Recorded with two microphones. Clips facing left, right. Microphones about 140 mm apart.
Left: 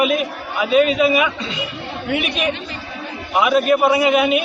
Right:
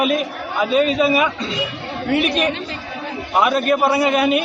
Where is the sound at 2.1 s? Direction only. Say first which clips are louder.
Right 4 dB; 40° right (ahead or behind).